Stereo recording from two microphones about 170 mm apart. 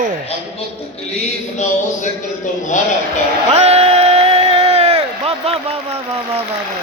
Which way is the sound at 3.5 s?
40° right (ahead or behind).